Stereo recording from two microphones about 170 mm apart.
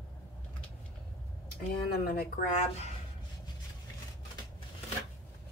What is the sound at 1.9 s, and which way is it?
Speech, 60° left (ahead or behind).